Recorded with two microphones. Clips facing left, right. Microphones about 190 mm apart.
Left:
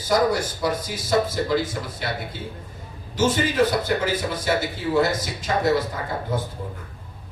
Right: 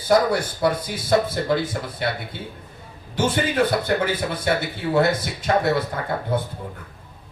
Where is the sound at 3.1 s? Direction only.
60° right (ahead or behind).